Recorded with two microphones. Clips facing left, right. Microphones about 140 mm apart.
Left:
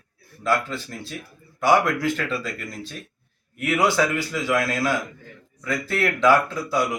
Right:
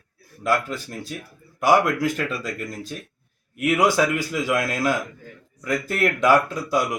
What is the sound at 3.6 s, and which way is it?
Speech, 15° right (ahead or behind).